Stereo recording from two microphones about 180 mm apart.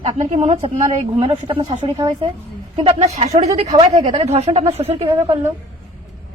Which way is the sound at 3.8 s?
30° right (ahead or behind).